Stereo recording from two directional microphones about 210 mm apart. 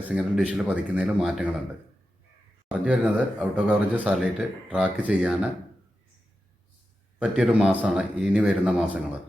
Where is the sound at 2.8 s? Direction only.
5° right (ahead or behind).